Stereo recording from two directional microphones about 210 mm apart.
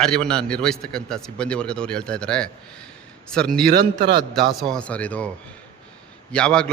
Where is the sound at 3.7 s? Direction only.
50° right (ahead or behind).